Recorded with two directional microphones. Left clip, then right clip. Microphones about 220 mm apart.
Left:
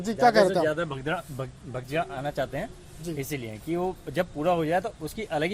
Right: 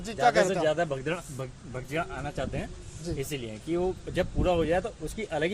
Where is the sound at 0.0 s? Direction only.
35° left (ahead or behind).